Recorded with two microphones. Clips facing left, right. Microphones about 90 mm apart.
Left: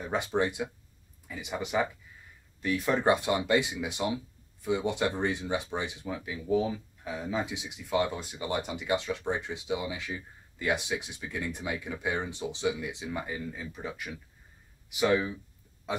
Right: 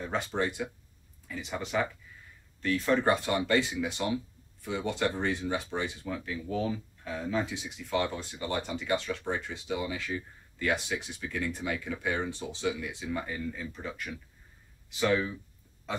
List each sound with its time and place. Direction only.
0.0 s speech: 15° left (ahead or behind)